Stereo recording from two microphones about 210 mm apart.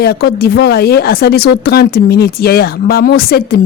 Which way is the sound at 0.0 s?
50° left (ahead or behind).